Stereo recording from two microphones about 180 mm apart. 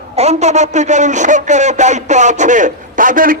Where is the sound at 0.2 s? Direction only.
40° right (ahead or behind).